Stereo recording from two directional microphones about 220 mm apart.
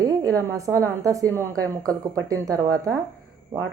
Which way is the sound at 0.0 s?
15° right (ahead or behind).